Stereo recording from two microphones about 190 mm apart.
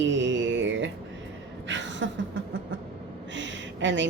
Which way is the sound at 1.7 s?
70° right (ahead or behind).